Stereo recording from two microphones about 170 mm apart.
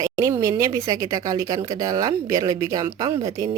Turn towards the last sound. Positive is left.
turn(degrees=-20)  # may be behind; listen again after turning